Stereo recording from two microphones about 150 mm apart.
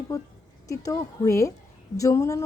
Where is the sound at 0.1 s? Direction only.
25° left (ahead or behind).